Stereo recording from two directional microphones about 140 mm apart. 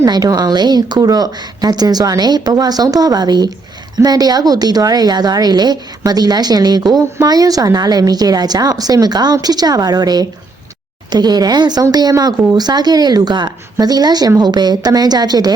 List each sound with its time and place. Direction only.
0.0 s a woman's voice: 25° right (ahead or behind)